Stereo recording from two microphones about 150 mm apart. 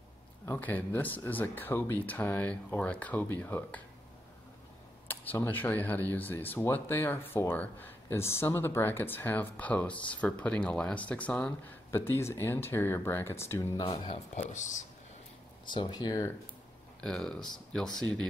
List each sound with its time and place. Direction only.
0.5 s speech: 10° left (ahead or behind)
5.0 s speech: 10° left (ahead or behind)
13.9 s speech: 50° left (ahead or behind)
15.6 s speech: 30° left (ahead or behind)
17.0 s speech: 5° left (ahead or behind)